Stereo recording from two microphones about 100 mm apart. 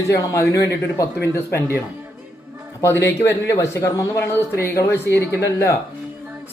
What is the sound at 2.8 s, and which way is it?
A man's voice, 25° left (ahead or behind).